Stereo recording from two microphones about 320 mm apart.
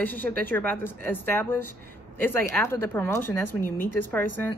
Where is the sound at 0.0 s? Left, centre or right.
Centre.